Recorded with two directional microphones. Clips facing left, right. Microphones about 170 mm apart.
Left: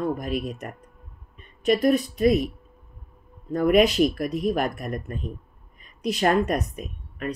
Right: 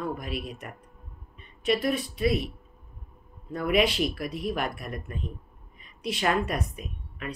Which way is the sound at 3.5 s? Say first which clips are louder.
Left 6 dB; 45° left (ahead or behind).